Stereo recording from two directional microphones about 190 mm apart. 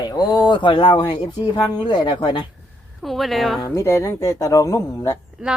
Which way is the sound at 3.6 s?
15° left (ahead or behind).